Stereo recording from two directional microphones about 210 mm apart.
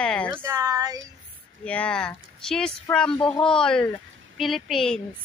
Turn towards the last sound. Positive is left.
turn(degrees=0)  # may be behind; listen again after turning